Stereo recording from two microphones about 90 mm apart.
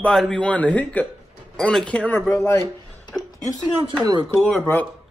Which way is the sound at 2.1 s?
25° left (ahead or behind).